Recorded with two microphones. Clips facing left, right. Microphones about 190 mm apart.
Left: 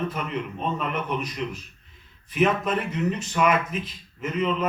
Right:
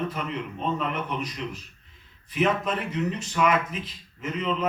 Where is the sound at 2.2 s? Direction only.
50° left (ahead or behind).